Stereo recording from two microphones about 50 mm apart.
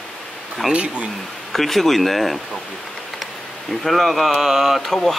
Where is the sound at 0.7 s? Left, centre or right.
Right.